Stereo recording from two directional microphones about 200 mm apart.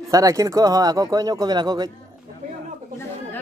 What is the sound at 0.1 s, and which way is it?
Speech, 15° right (ahead or behind).